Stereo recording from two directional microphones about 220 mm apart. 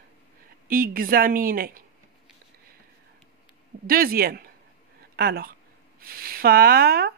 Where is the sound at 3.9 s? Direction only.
40° right (ahead or behind).